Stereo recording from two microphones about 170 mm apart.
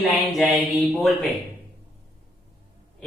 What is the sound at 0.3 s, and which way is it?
Speech, centre (ahead or behind).